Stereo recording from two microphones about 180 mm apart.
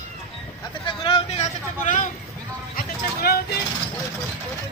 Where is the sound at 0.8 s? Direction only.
30° left (ahead or behind).